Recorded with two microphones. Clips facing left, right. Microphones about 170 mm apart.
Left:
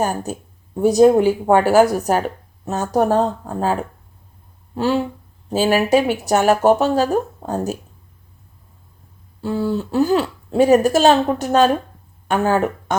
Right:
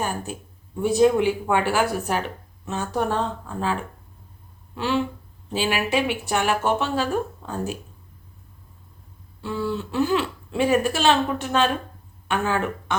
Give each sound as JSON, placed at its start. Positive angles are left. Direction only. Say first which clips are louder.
{"t": 0.0, "sound": "speech", "louder": "left 7 dB", "side_deg": 40}
{"t": 9.4, "sound": "speech", "louder": "left 6 dB", "side_deg": 40}